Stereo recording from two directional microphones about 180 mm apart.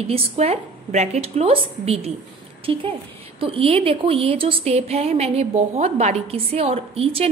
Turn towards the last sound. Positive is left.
turn(degrees=-35)  # may be behind; listen again after turning